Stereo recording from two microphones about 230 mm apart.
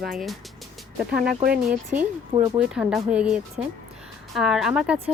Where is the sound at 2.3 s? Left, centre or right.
Centre.